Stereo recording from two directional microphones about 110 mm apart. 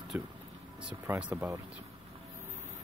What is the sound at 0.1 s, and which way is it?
Speech, 20° right (ahead or behind).